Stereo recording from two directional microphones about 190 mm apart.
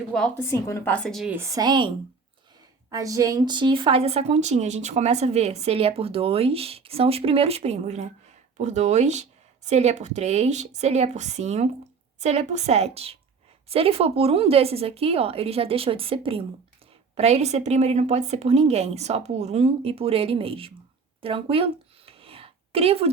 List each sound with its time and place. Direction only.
0.3 s a woman's voice: 15° left (ahead or behind)
1.4 s a woman's voice: 15° right (ahead or behind)
2.9 s a woman's voice: 15° right (ahead or behind)
21.2 s a sound: 30° right (ahead or behind)